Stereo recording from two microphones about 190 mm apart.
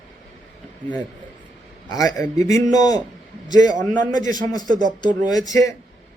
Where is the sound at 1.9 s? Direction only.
20° left (ahead or behind).